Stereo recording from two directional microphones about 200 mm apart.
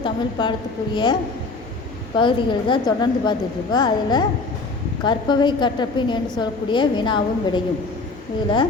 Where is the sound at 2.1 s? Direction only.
25° left (ahead or behind).